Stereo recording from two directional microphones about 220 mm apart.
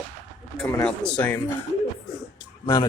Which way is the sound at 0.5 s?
5° left (ahead or behind).